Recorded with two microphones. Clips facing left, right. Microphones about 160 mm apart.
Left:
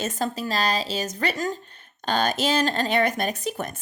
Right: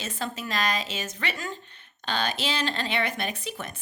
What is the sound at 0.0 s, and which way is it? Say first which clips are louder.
Speech: left 6 dB; 40° left (ahead or behind).